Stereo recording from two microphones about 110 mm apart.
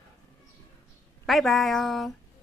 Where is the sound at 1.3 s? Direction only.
Centre (ahead or behind).